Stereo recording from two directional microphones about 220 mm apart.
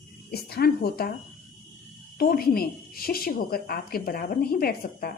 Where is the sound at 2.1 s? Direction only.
40° left (ahead or behind).